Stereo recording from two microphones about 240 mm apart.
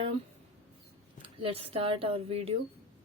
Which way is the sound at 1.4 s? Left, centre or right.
Right.